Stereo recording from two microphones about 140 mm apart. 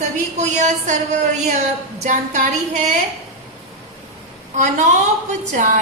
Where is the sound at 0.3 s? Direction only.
60° right (ahead or behind).